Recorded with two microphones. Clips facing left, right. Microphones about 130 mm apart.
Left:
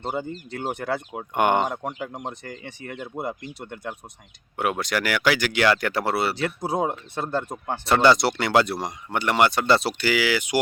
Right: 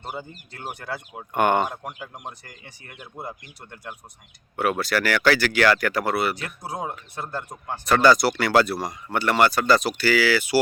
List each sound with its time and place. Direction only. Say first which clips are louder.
0.8 s speech: left 6 dB; 65° left (ahead or behind)
1.3 s speech: even; 20° left (ahead or behind)
3.1 s speech: left 5 dB; 55° left (ahead or behind)
4.5 s speech: right 2 dB; 20° left (ahead or behind)